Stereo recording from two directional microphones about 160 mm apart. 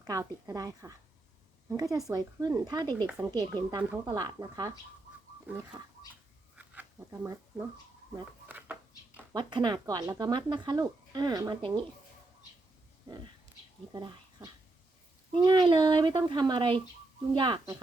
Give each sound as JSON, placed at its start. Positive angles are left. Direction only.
{"t": 0.0, "sound": "speech", "side_deg": -20}
{"t": 6.6, "sound": "a sound", "side_deg": -10}
{"t": 9.3, "sound": "speech", "side_deg": -30}
{"t": 13.9, "sound": "speech", "side_deg": -25}